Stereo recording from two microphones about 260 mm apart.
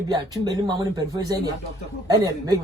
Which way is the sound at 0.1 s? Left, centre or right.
Centre.